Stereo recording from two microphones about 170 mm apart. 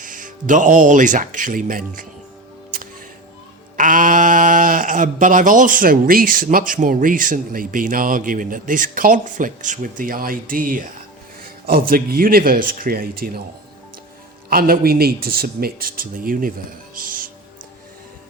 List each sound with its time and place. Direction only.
0.0 s speech: 50° right (ahead or behind)
3.8 s speech: 50° right (ahead or behind)
14.5 s speech: 60° right (ahead or behind)
16.9 s music: 55° right (ahead or behind)